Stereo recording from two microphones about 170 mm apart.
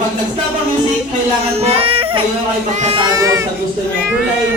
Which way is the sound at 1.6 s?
35° right (ahead or behind).